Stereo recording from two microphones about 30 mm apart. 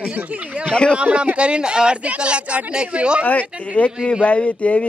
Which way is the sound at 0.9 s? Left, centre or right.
Right.